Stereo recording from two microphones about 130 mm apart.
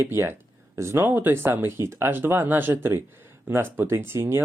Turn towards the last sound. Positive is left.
turn(degrees=-20)  # may be behind; listen again after turning